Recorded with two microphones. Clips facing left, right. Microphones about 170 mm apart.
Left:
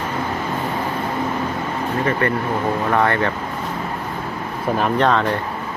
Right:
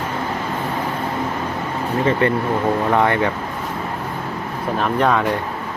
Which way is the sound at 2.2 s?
20° right (ahead or behind).